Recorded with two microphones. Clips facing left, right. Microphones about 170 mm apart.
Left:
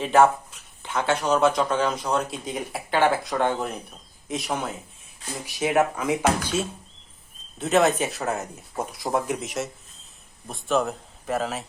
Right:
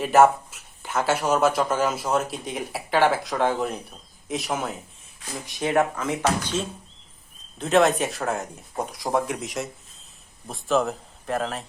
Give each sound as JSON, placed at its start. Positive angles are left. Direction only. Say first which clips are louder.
{"t": 0.0, "sound": "speech", "louder": "right 1 dB", "side_deg": -5}